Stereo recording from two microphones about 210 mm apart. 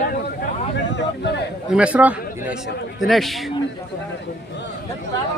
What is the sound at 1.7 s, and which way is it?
A man's voice, 5° right (ahead or behind).